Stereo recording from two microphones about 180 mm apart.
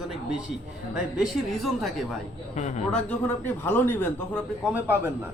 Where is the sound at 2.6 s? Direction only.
40° left (ahead or behind).